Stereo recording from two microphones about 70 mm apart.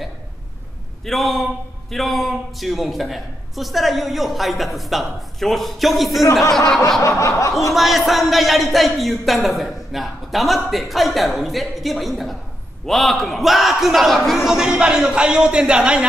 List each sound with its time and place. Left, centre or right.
1.0 s speech: centre
7.0 s snicker: left
7.7 s speech: centre